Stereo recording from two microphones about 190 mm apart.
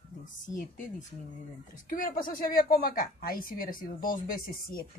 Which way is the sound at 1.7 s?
45° left (ahead or behind).